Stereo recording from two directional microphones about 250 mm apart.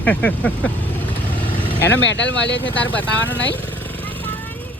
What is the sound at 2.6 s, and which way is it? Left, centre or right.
Speech, centre.